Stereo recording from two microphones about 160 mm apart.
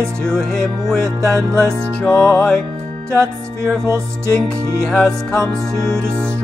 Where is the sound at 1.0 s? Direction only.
20° right (ahead or behind).